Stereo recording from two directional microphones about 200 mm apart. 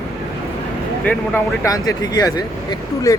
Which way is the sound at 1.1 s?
5° left (ahead or behind).